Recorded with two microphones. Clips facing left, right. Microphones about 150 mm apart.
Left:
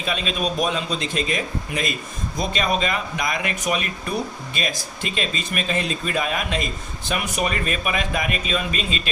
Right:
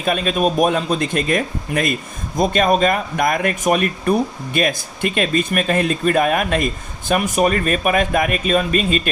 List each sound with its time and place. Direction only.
0.0 s speech: 50° right (ahead or behind)